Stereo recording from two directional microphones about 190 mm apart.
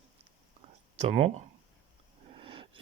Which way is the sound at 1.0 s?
35° right (ahead or behind).